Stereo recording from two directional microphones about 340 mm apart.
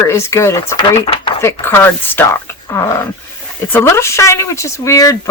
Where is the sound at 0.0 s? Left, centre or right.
Centre.